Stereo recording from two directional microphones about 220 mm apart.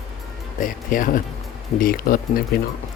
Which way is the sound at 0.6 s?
35° left (ahead or behind).